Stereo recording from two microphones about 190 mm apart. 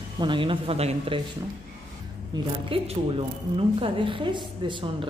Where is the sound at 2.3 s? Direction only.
20° right (ahead or behind).